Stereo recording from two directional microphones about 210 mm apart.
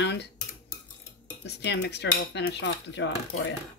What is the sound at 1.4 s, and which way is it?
Speech, 55° left (ahead or behind).